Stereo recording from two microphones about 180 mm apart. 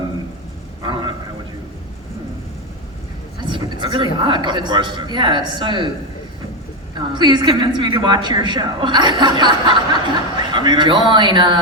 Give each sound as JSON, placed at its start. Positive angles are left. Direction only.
{"t": 0.8, "sound": "a sound", "side_deg": -25}
{"t": 3.4, "sound": "speech", "side_deg": -25}
{"t": 7.1, "sound": "a woman's voice", "side_deg": -25}